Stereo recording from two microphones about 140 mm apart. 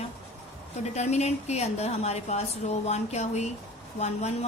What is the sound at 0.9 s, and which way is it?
Speech, 50° left (ahead or behind).